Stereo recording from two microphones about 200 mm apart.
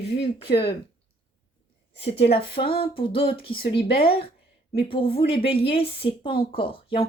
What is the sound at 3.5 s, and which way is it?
Speech, 50° left (ahead or behind).